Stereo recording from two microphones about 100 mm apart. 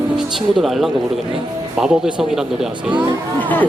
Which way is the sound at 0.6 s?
Centre (ahead or behind).